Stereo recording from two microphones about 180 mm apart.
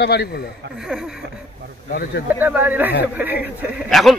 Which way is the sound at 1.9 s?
55° left (ahead or behind).